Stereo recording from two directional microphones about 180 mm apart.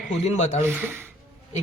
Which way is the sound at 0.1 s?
40° left (ahead or behind).